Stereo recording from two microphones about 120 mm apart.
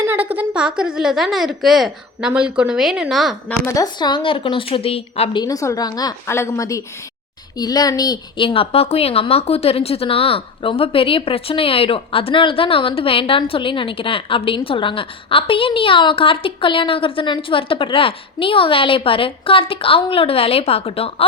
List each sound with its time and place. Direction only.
0.1 s a woman's voice: 15° right (ahead or behind)
4.0 s a woman's voice: 40° left (ahead or behind)
5.3 s a woman's voice: 35° left (ahead or behind)
6.2 s a woman's voice: 20° left (ahead or behind); by 21.2 s 55° left (ahead or behind)